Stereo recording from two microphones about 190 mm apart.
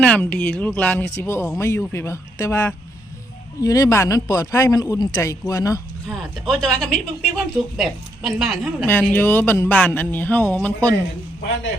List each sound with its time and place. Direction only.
0.0 s a man's voice: 5° left (ahead or behind)
6.1 s a woman's voice: centre (ahead or behind)
8.9 s a man's voice: 10° left (ahead or behind)